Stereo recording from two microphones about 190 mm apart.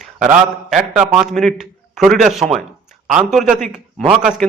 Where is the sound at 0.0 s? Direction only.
Centre (ahead or behind).